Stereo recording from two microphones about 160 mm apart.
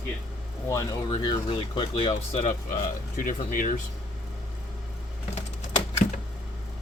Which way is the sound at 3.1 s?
60° left (ahead or behind).